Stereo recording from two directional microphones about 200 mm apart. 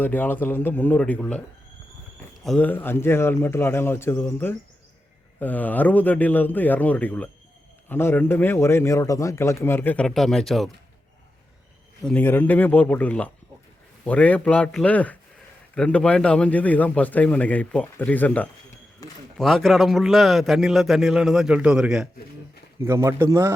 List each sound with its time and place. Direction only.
0.0 s a man's voice: 10° left (ahead or behind)
12.0 s a man's voice: 10° left (ahead or behind)
19.0 s a sound: 15° left (ahead or behind)
19.4 s a man's voice: centre (ahead or behind)
22.8 s speech: 15° right (ahead or behind)